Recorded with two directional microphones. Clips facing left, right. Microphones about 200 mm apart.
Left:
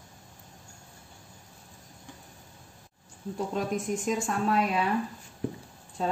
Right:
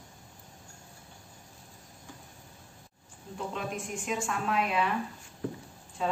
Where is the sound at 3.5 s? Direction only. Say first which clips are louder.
Left 6 dB; 40° left (ahead or behind).